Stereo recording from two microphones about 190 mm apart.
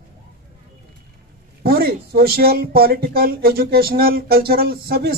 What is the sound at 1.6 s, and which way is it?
Speech, 55° right (ahead or behind).